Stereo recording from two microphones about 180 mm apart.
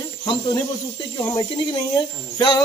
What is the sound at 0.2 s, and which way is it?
Speech, 25° left (ahead or behind).